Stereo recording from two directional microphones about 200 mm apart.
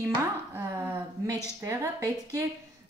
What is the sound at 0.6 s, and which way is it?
Speech, 10° right (ahead or behind).